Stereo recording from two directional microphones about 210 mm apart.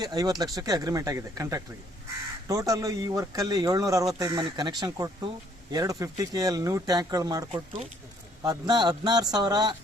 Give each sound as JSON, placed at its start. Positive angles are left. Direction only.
{"t": 0.0, "sound": "speech", "side_deg": -20}
{"t": 8.4, "sound": "speech", "side_deg": -20}